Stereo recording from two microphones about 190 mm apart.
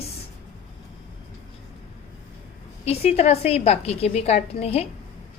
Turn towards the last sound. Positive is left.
turn(degrees=30)  # may be behind; listen again after turning